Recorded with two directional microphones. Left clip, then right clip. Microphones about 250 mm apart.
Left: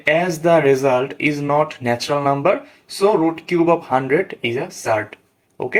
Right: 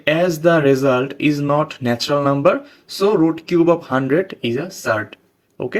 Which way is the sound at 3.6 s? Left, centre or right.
Right.